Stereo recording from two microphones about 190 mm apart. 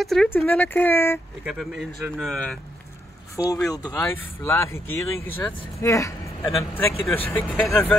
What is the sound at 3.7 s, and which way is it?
Speech, 20° left (ahead or behind).